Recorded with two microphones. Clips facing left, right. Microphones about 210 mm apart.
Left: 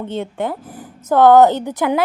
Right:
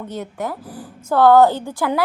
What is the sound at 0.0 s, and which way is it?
A woman's voice, 25° left (ahead or behind).